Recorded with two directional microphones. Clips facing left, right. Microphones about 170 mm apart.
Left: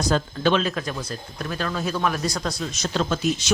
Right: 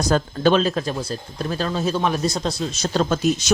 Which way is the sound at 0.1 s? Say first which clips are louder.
Right 4 dB; 40° right (ahead or behind).